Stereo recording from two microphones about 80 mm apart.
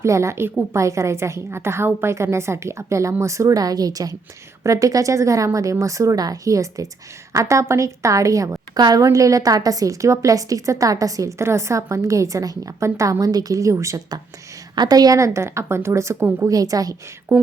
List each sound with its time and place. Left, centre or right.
0.0 s a woman's voice: right
14.8 s a woman's voice: right
16.5 s a woman's voice: right
17.3 s a woman's voice: right